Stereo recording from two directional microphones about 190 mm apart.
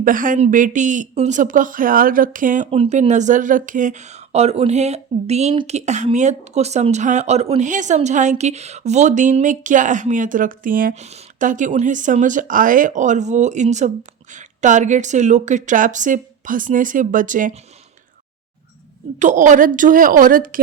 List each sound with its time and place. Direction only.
0.0 s speech: 45° right (ahead or behind)
19.2 s speech: 40° right (ahead or behind)